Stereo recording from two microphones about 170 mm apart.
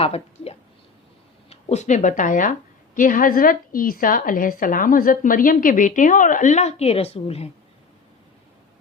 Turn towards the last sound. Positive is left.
turn(degrees=35)  # may be behind; listen again after turning